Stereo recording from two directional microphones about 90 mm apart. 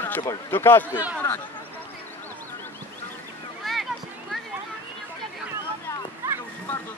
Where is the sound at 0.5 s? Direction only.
25° left (ahead or behind).